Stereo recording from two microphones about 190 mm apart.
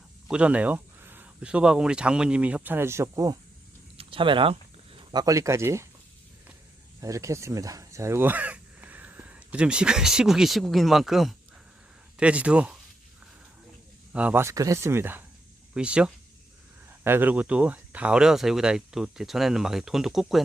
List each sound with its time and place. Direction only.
0.3 s speech: 5° right (ahead or behind)
3.9 s speech: 25° right (ahead or behind)
7.0 s speech: 15° right (ahead or behind)
14.1 s speech: 5° right (ahead or behind)